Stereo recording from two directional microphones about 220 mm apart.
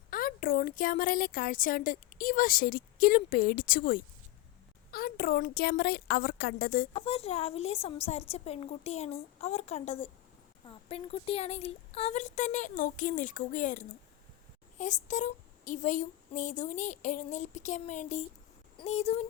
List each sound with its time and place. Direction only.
0.1 s a woman's voice: 40° left (ahead or behind)
6.9 s a woman's voice: 25° left (ahead or behind)